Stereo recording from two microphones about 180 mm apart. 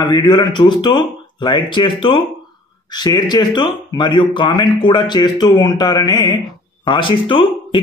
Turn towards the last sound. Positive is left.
turn(degrees=30)  # may be behind; listen again after turning